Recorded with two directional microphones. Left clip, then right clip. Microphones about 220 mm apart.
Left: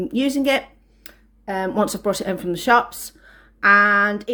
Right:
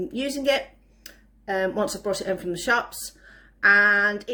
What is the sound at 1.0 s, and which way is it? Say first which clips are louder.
Speech: left 1 dB; 30° left (ahead or behind).